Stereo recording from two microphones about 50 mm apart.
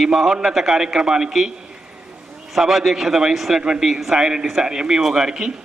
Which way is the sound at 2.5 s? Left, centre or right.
Centre.